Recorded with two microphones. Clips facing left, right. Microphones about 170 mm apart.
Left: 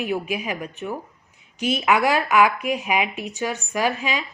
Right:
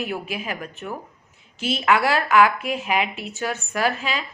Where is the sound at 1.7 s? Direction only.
15° left (ahead or behind).